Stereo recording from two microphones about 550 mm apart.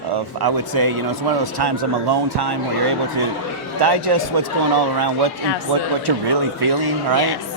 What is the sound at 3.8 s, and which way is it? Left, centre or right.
Speech, right.